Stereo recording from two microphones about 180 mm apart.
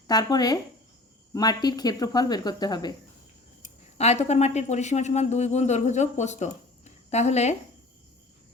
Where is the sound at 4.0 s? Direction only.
35° left (ahead or behind).